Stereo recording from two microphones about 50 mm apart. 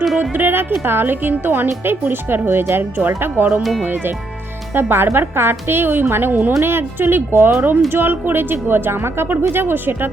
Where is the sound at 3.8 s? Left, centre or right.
Right.